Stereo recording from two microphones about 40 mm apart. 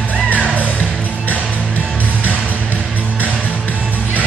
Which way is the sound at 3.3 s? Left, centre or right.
Left.